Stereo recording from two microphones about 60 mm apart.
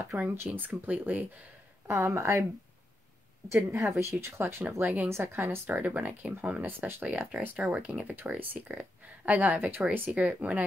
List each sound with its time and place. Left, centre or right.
0.0 s speech: right
1.9 s speech: right
3.7 s speech: right
5.8 s speech: right